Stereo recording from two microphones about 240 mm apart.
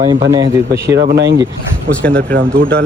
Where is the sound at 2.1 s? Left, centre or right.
Right.